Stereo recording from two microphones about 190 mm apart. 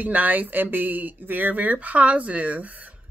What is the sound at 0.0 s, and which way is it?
Speech, 10° right (ahead or behind).